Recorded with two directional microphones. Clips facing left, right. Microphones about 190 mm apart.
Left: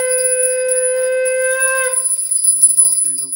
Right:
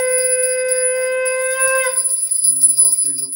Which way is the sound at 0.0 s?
40° left (ahead or behind).